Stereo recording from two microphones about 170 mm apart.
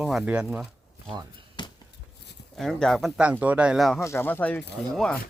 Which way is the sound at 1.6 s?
25° left (ahead or behind).